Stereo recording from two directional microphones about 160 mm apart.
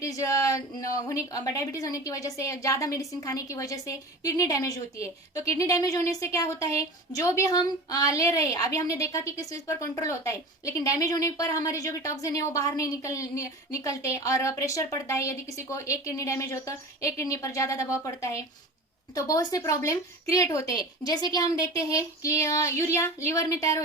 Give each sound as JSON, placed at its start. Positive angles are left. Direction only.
{"t": 0.0, "sound": "a woman's voice", "side_deg": 20}